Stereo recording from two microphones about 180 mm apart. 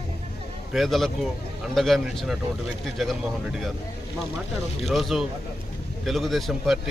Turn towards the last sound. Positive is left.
turn(degrees=0)  # may be behind; listen again after turning